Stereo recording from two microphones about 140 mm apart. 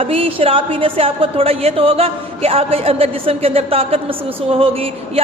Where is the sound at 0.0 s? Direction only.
40° right (ahead or behind).